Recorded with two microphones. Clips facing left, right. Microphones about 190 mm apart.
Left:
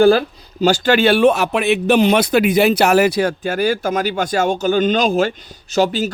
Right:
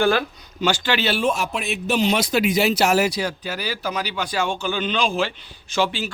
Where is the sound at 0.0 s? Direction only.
35° left (ahead or behind).